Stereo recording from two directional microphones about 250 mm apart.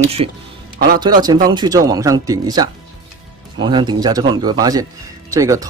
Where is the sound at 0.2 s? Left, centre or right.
Right.